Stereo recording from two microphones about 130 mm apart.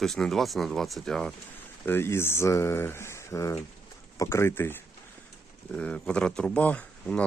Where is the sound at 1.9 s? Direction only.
20° left (ahead or behind).